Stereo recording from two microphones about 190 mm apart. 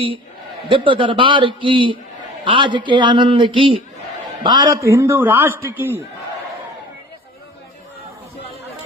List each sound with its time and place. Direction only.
0.7 s a man's voice: 25° right (ahead or behind); by 6.0 s 10° right (ahead or behind)